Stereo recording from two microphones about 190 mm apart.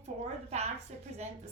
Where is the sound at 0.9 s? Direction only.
35° right (ahead or behind).